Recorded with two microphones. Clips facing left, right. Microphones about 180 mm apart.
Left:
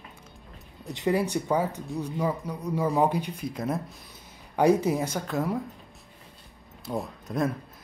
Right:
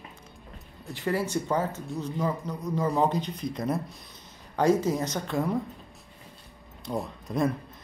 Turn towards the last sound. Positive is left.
turn(degrees=0)  # may be behind; listen again after turning